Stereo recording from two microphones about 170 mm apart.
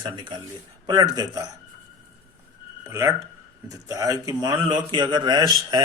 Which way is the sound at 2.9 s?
15° right (ahead or behind).